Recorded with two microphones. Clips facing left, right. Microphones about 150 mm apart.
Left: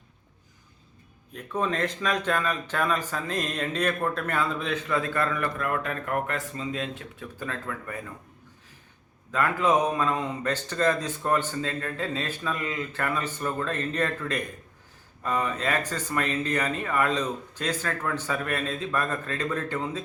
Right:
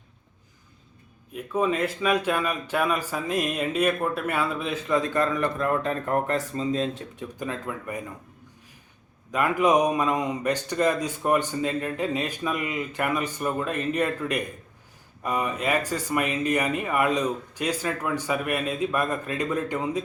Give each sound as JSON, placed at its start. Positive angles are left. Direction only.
{"t": 1.3, "sound": "speech", "side_deg": -10}
{"t": 4.9, "sound": "speech", "side_deg": -20}
{"t": 7.2, "sound": "speech", "side_deg": -20}
{"t": 9.3, "sound": "speech", "side_deg": -15}